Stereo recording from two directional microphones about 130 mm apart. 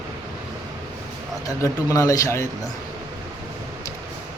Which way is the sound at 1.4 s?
25° left (ahead or behind).